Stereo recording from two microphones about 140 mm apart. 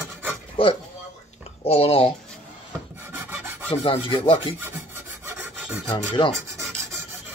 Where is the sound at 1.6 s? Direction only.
45° left (ahead or behind).